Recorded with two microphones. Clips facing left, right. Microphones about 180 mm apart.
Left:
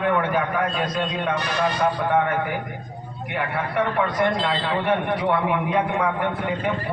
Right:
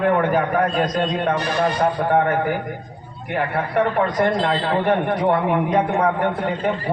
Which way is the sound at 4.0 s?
40° right (ahead or behind).